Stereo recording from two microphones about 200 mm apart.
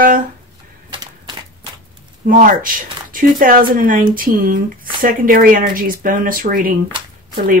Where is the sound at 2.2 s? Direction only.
45° right (ahead or behind).